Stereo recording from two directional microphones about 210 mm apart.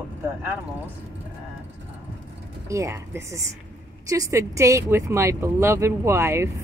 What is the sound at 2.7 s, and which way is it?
Speech, 15° right (ahead or behind).